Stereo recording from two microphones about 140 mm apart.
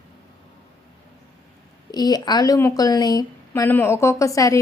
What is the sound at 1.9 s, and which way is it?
A woman's voice, 30° left (ahead or behind).